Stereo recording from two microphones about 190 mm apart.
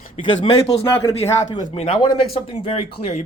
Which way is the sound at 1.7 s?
25° left (ahead or behind).